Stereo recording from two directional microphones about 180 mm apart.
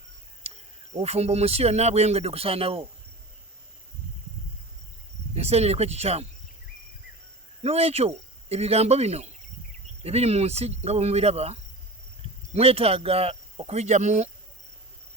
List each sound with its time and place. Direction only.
0.4 s cricket: 35° right (ahead or behind)
1.0 s a man's voice: 35° right (ahead or behind)
5.3 s a man's voice: 35° right (ahead or behind)
7.6 s a man's voice: 35° right (ahead or behind)